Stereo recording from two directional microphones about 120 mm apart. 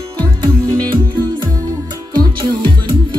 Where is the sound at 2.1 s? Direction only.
40° right (ahead or behind).